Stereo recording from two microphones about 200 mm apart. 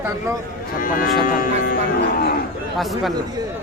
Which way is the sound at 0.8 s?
45° left (ahead or behind).